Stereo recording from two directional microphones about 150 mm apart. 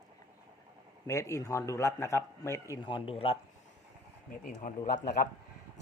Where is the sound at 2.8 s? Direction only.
35° left (ahead or behind).